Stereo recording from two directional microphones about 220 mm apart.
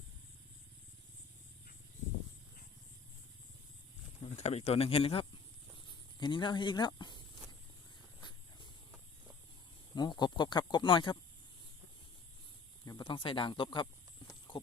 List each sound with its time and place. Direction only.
4.2 s speech: 30° left (ahead or behind)
9.9 s speech: 20° left (ahead or behind)
12.8 s speech: 20° left (ahead or behind)
14.3 s clip-clop: 20° left (ahead or behind)